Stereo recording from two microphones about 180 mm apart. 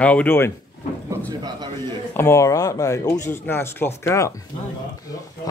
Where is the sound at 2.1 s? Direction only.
15° left (ahead or behind).